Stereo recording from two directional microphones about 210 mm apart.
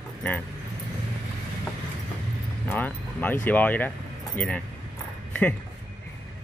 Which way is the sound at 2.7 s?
10° left (ahead or behind).